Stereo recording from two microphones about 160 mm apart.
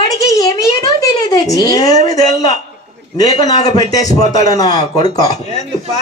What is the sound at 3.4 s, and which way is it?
A child's voice, 25° left (ahead or behind).